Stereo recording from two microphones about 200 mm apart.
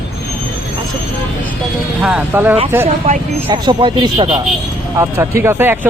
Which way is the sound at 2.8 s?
30° right (ahead or behind).